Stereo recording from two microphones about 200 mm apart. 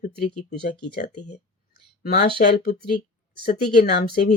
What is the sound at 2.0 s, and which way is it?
Speech, 50° left (ahead or behind).